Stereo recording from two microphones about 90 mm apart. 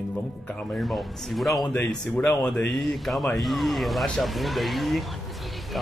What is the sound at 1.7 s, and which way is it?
Speech, 15° left (ahead or behind).